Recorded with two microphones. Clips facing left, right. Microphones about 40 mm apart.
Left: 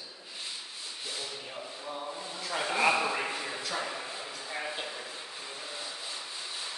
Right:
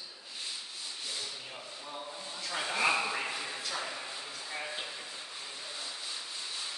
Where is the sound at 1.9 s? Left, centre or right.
Centre.